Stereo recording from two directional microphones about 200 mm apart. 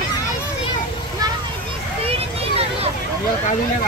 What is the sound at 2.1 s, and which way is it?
Vehicle, 30° right (ahead or behind).